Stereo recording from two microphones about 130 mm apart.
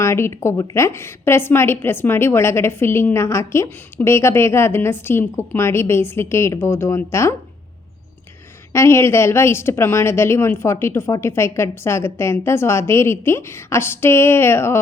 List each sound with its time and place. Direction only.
0.0 s a woman's voice: 20° left (ahead or behind)
8.7 s a woman's voice: 20° left (ahead or behind)